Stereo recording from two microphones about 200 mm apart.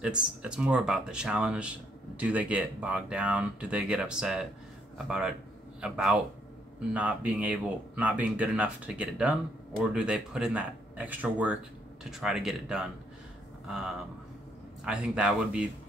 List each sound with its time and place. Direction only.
0.0 s speech: 5° right (ahead or behind)